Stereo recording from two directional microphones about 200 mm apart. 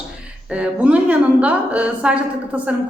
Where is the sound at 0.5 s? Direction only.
5° right (ahead or behind).